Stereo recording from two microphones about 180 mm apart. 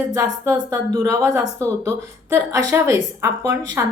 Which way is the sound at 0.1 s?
20° right (ahead or behind).